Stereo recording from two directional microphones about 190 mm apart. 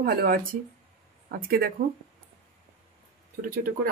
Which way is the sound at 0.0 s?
55° right (ahead or behind).